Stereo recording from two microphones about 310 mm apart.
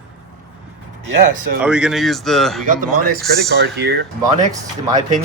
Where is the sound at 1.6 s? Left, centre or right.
Centre.